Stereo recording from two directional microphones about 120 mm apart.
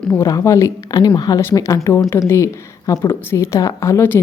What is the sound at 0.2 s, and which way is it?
Speech, 30° left (ahead or behind).